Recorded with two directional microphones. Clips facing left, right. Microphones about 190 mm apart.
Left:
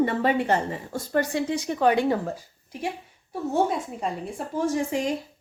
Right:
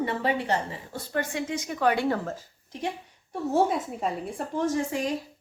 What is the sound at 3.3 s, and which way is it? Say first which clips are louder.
A woman's voice: even; centre (ahead or behind).